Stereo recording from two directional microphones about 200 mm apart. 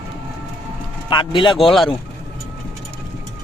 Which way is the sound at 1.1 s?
25° left (ahead or behind).